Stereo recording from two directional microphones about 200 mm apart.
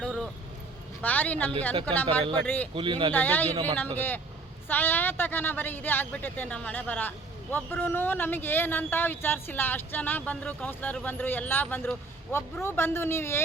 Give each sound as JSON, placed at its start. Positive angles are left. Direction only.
{"t": 0.0, "sound": "vehicle", "side_deg": 5}
{"t": 1.0, "sound": "speech", "side_deg": 10}
{"t": 2.7, "sound": "speech", "side_deg": -25}
{"t": 3.1, "sound": "speech", "side_deg": 10}
{"t": 3.5, "sound": "speech", "side_deg": -30}
{"t": 3.9, "sound": "speech", "side_deg": 10}